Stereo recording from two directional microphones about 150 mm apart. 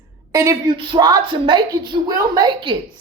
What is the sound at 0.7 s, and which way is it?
Speech, 35° right (ahead or behind).